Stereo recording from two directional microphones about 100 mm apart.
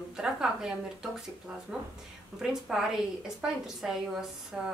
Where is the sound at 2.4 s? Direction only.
5° right (ahead or behind).